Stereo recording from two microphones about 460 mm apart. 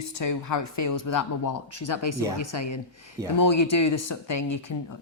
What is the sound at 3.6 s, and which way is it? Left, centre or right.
Speech, left.